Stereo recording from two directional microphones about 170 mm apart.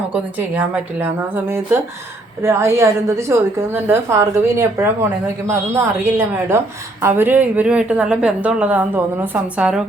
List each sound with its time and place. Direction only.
0.1 s a woman's voice: 10° right (ahead or behind)